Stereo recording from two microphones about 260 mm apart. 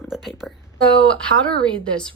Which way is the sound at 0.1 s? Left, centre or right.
Centre.